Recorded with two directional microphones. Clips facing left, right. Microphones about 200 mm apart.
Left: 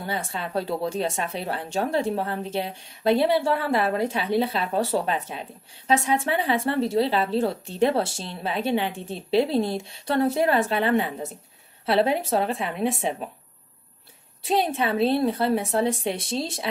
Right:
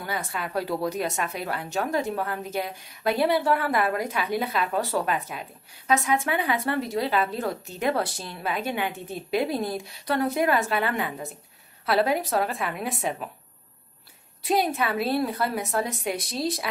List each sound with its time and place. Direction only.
0.0 s a woman's voice: 30° left (ahead or behind)
14.6 s a woman's voice: 30° left (ahead or behind)